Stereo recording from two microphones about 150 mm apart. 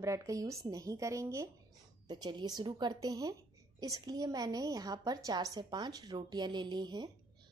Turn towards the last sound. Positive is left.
turn(degrees=-30)  # may be behind; listen again after turning